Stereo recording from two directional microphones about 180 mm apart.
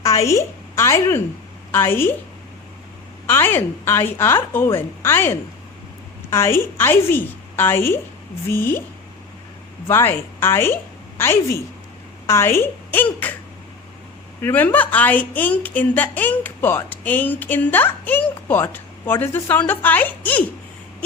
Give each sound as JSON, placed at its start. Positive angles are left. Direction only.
{"t": 0.0, "sound": "speech", "side_deg": 15}
{"t": 3.2, "sound": "speech", "side_deg": 10}
{"t": 9.8, "sound": "speech", "side_deg": 10}
{"t": 14.4, "sound": "speech", "side_deg": 10}